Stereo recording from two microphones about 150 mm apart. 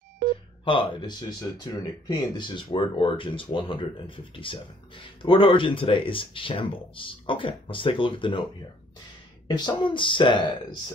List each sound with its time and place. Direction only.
0.7 s speech: 35° left (ahead or behind)
9.5 s speech: 30° left (ahead or behind)